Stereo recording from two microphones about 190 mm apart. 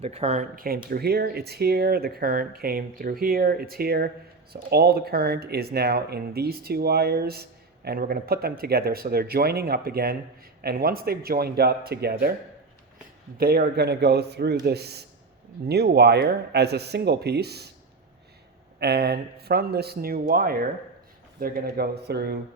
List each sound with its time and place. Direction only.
0.0 s speech: 35° right (ahead or behind); by 12.1 s 55° right (ahead or behind)
13.3 s speech: 55° right (ahead or behind)
18.8 s speech: 55° right (ahead or behind)